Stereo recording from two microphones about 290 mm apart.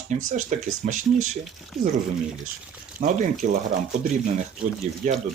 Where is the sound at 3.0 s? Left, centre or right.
Right.